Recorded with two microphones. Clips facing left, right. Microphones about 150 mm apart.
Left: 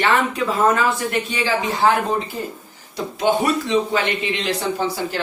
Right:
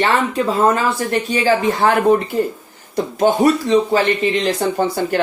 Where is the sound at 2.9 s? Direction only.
45° right (ahead or behind).